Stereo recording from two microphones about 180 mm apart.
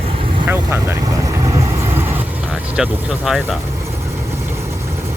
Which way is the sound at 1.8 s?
15° right (ahead or behind).